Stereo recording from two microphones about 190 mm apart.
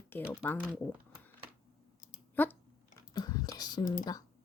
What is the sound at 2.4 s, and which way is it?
Speech, 10° left (ahead or behind).